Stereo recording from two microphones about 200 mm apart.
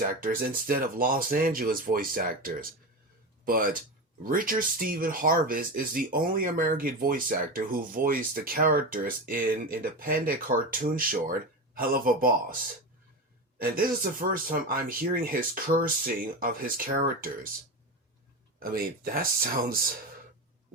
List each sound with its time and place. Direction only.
0.0 s speech: 45° right (ahead or behind)
13.6 s speech: 45° right (ahead or behind)
18.6 s speech: 45° right (ahead or behind)